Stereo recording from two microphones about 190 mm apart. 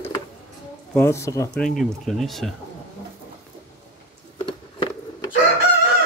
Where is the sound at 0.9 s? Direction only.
15° left (ahead or behind).